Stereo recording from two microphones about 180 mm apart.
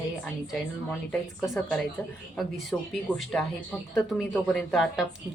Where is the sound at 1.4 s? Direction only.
5° left (ahead or behind).